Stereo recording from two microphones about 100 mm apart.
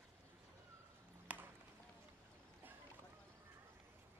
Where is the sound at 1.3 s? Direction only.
15° right (ahead or behind).